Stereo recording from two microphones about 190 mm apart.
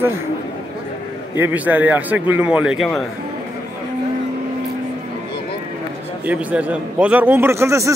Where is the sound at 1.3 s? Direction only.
10° right (ahead or behind).